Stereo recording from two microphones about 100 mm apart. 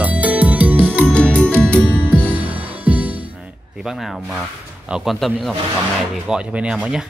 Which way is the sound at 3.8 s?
Centre (ahead or behind).